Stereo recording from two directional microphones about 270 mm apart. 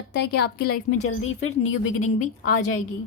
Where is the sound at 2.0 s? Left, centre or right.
Left.